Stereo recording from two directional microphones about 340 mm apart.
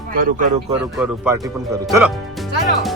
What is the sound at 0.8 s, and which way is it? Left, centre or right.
A man's voice, centre.